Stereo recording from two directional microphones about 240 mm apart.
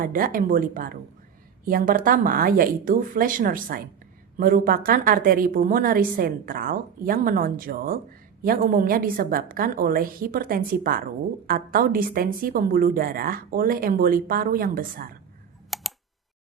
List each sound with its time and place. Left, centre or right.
0.0 s a woman's voice: right
15.7 s typing: centre